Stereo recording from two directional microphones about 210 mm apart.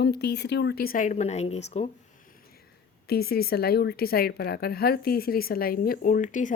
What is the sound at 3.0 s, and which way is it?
A woman's voice, 45° left (ahead or behind).